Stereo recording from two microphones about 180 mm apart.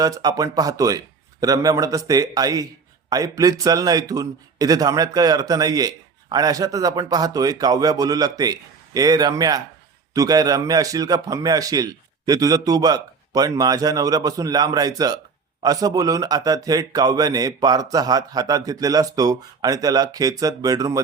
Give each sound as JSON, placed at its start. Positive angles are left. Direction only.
{"t": 0.0, "sound": "a man's voice", "side_deg": -20}